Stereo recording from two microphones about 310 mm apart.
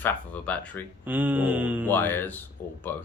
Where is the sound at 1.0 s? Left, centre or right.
Centre.